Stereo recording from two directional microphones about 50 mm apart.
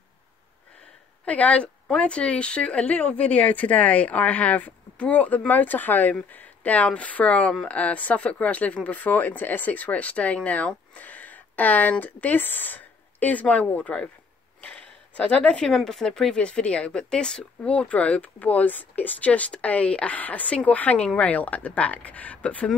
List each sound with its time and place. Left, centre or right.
1.2 s speech: left
14.6 s a sound: left
15.7 s speech: centre
16.3 s speech: left
17.7 s speech: left